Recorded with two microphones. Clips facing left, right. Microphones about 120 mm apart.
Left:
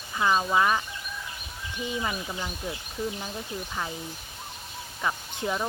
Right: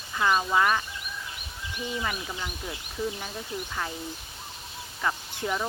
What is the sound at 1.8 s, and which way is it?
Speech, 20° left (ahead or behind).